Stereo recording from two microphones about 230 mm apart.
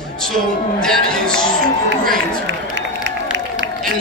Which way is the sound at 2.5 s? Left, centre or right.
Right.